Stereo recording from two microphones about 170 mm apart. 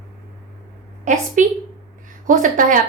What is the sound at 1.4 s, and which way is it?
A woman's voice, 50° right (ahead or behind).